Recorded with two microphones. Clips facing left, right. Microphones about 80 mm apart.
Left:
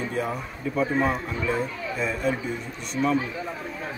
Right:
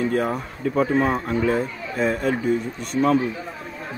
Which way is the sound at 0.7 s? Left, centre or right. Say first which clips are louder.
Right 4 dB; right.